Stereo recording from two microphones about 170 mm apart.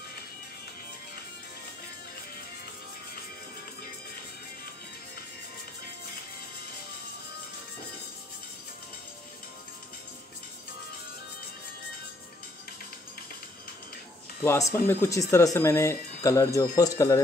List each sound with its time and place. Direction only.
14.4 s speech: 15° left (ahead or behind)